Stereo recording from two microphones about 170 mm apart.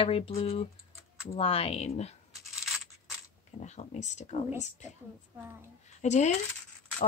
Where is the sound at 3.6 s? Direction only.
45° left (ahead or behind).